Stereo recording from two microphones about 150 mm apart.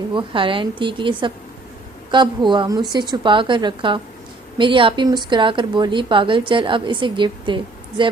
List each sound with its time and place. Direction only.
0.1 s a woman's voice: 35° right (ahead or behind)